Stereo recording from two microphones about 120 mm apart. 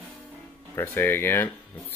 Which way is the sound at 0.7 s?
15° left (ahead or behind).